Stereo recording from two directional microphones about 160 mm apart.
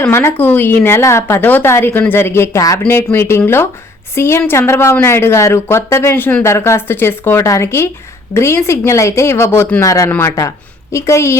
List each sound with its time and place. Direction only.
0.0 s a woman's voice: 15° left (ahead or behind)